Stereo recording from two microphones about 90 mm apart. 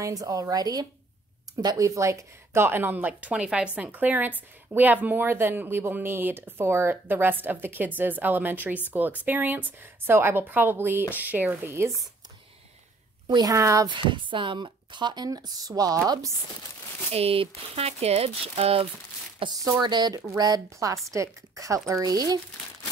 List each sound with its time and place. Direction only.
0.0 s a woman's voice: 40° right (ahead or behind)
1.8 s speech: 35° right (ahead or behind)
13.3 s a woman's voice: 40° right (ahead or behind)
13.8 s a woman's voice: 65° right (ahead or behind); by 16.3 s 40° right (ahead or behind)
17.2 s speech: 90° right
19.4 s speech: 80° right
19.8 s a woman's voice: 55° right (ahead or behind)